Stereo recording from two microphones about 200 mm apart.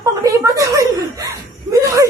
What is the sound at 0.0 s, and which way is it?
Chuckle, 15° right (ahead or behind).